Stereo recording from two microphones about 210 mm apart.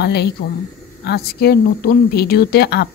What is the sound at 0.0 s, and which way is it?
Speech, 50° left (ahead or behind).